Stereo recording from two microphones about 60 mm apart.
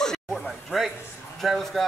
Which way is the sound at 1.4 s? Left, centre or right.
Centre.